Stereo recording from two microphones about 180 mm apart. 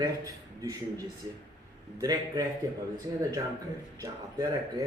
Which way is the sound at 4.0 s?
20° right (ahead or behind).